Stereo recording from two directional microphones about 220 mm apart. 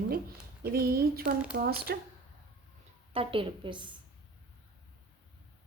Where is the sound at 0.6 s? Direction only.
45° right (ahead or behind).